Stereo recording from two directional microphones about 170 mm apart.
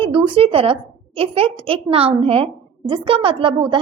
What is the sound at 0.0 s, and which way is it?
A woman's voice, 30° right (ahead or behind).